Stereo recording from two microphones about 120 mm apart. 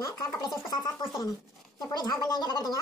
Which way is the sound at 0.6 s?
35° left (ahead or behind).